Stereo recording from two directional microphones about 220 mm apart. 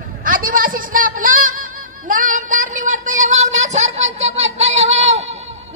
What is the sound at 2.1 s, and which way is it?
Child singing, 35° right (ahead or behind).